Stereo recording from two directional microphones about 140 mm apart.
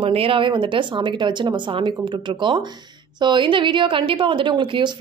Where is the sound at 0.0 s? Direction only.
40° right (ahead or behind).